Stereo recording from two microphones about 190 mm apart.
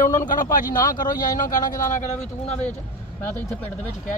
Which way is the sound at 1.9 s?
35° left (ahead or behind).